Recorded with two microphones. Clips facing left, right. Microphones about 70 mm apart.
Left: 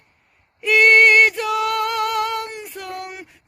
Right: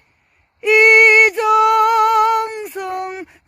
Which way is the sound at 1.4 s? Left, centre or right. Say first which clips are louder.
Right 9 dB; right.